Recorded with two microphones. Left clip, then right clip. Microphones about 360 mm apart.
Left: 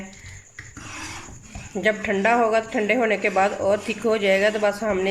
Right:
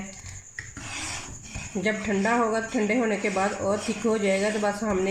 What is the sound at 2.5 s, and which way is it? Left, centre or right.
Speech, left.